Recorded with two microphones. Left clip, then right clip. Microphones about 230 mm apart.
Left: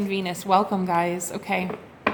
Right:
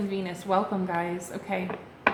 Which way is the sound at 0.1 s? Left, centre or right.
Left.